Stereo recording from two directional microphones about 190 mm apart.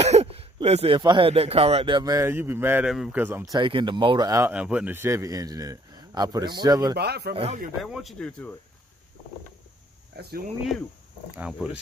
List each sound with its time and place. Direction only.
0.0 s speech: 35° right (ahead or behind); by 3.4 s 10° right (ahead or behind)
3.5 s speech: 25° right (ahead or behind)
7.0 s speech: 60° right (ahead or behind)
7.8 s a man's voice: centre (ahead or behind)
10.1 s speech: 55° right (ahead or behind)
11.3 s a man's voice: 5° right (ahead or behind)